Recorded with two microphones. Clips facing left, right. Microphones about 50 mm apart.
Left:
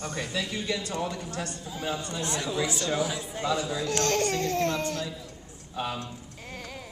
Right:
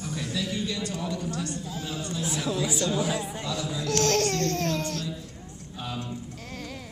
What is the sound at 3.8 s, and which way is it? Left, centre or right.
Speech, centre.